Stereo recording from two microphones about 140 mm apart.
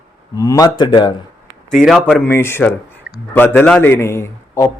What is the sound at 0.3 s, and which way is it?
Speech, 25° left (ahead or behind).